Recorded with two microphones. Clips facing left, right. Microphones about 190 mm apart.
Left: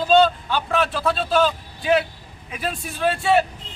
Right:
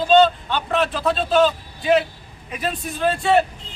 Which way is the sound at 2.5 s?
5° left (ahead or behind).